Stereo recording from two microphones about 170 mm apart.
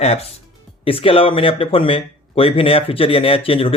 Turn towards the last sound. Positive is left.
turn(degrees=35)  # may be behind; listen again after turning